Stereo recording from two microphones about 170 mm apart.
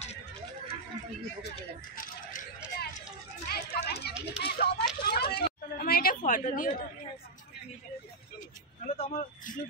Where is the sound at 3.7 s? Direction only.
70° left (ahead or behind).